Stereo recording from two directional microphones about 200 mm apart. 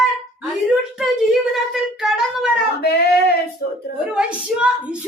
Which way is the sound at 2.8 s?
55° left (ahead or behind).